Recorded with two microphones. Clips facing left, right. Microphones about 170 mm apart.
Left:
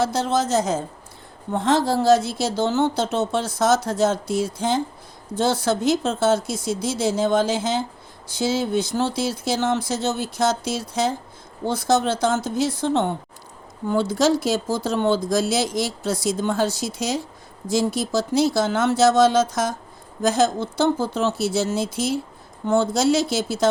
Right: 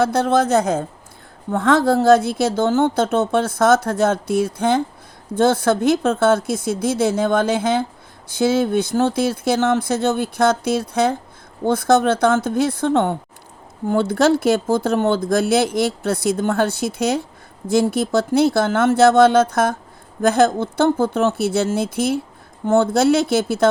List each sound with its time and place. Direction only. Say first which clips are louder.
0.0 s speech: right 5 dB; 55° right (ahead or behind)